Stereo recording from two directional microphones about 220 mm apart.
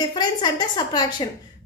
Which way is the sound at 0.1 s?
20° left (ahead or behind).